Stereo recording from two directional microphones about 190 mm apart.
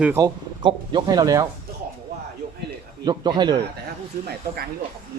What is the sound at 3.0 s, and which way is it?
Speech, 20° right (ahead or behind).